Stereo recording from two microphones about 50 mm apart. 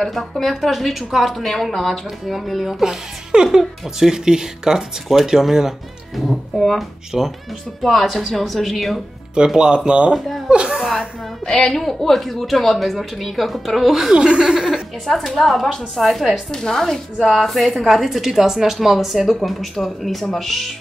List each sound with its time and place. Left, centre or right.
0.0 s a woman's voice: centre
6.2 s a woman's voice: centre
9.5 s speech: centre
10.1 s a woman's voice: centre
10.5 s speech: centre
11.0 s a woman's voice: centre
14.1 s speech: centre
15.0 s a woman's voice: centre